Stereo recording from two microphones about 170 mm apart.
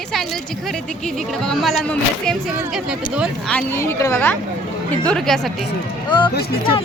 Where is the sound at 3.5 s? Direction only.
10° left (ahead or behind).